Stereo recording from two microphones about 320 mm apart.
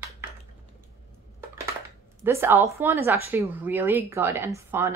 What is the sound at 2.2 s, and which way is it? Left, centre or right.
Speech, centre.